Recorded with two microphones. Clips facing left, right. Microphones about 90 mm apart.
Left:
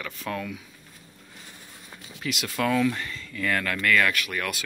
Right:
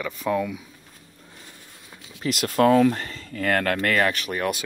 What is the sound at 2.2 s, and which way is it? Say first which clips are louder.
Speech: right 8 dB; 45° right (ahead or behind).